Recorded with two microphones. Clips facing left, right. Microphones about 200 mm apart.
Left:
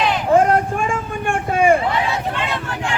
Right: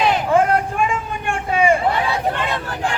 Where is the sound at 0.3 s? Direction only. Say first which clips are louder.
Left 4 dB; 40° left (ahead or behind).